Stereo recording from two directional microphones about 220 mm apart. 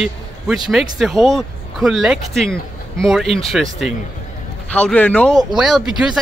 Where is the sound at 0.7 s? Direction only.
Centre (ahead or behind).